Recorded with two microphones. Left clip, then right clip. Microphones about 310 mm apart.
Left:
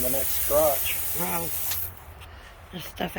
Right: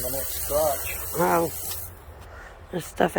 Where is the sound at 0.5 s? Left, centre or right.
Left.